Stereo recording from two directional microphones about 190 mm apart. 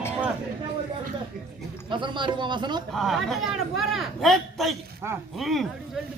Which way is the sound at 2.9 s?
Centre (ahead or behind).